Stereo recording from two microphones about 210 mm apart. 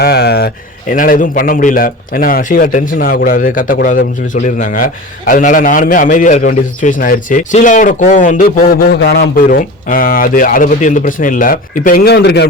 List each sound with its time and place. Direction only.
0.0 s a man's voice: 50° left (ahead or behind)